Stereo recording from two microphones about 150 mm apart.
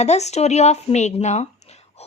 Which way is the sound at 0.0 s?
50° left (ahead or behind).